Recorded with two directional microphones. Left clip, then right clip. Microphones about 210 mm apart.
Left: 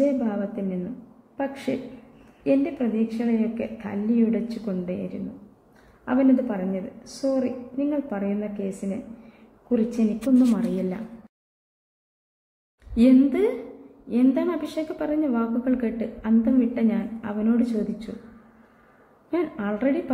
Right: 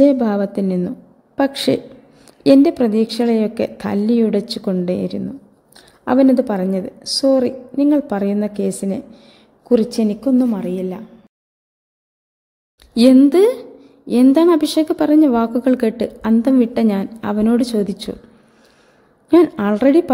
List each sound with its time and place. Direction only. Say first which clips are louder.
0.0 s a woman's voice: right 10 dB; 45° right (ahead or behind)
10.5 s a woman's voice: right 4 dB; 20° right (ahead or behind)
12.9 s a woman's voice: right 8 dB; 50° right (ahead or behind)
19.3 s a woman's voice: right 14 dB; 50° right (ahead or behind)